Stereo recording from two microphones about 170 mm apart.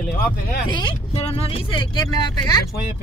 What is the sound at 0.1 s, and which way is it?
Speech, 65° left (ahead or behind).